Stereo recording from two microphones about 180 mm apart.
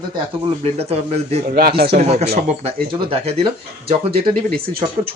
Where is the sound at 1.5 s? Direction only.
60° right (ahead or behind).